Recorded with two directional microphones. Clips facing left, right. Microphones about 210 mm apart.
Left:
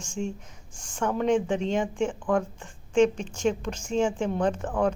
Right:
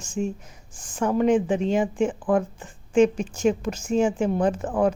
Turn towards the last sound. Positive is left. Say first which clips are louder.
# right 4 dB
turn(degrees=-5)  # may be behind; listen again after turning